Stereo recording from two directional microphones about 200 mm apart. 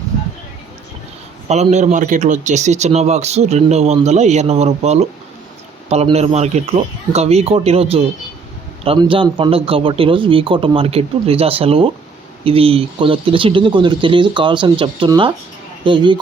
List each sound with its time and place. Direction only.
1.5 s speech: 35° right (ahead or behind)